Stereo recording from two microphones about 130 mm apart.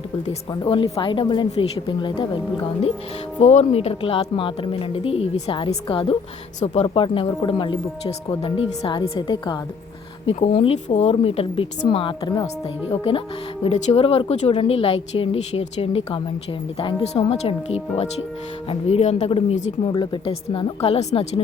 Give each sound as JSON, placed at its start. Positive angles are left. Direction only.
{"t": 0.6, "sound": "a woman's voice", "side_deg": 35}
{"t": 3.4, "sound": "a woman's voice", "side_deg": 60}
{"t": 10.2, "sound": "a woman's voice", "side_deg": 55}
{"t": 12.9, "sound": "speech", "side_deg": 45}
{"t": 19.9, "sound": "speech", "side_deg": 40}